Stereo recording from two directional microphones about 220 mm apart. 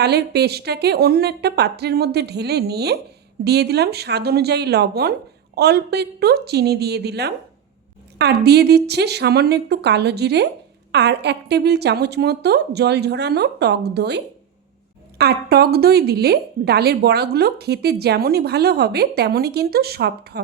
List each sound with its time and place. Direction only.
0.0 s a woman's voice: 45° right (ahead or behind)
15.2 s a woman's voice: 45° right (ahead or behind)